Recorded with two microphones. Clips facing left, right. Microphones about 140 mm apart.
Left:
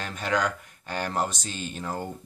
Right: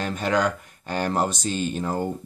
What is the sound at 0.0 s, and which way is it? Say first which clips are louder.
Speech: right 4 dB; 30° right (ahead or behind).